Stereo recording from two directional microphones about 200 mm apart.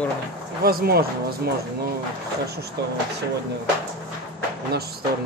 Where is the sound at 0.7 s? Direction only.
50° right (ahead or behind).